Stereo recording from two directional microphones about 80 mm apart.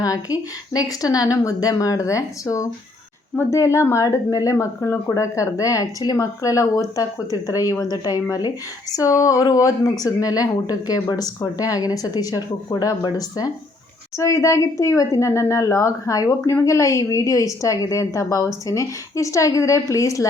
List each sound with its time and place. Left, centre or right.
0.0 s speech: left
14.2 s speech: left